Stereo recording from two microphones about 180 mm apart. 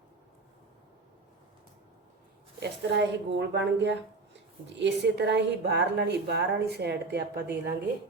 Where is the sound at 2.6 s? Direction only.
70° right (ahead or behind).